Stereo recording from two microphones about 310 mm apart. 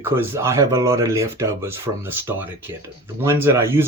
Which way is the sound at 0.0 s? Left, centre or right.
Centre.